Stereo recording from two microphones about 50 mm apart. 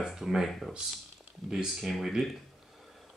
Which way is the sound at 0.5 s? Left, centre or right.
Centre.